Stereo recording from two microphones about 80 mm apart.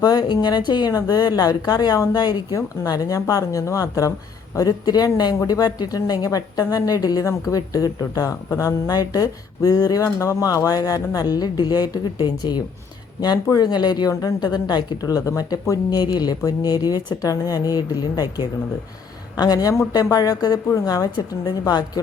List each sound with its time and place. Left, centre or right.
0.0 s a woman's voice: left
0.9 s a woman's voice: left
2.6 s speech: left
8.4 s a woman's voice: left
8.9 s a woman's voice: left
14.1 s a woman's voice: left
14.3 s a woman's voice: left
15.9 s a woman's voice: left